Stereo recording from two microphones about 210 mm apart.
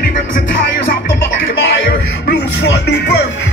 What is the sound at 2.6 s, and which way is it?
Music, 55° left (ahead or behind).